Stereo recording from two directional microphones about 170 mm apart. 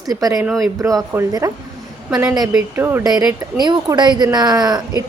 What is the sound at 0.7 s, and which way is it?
Speech, 20° right (ahead or behind).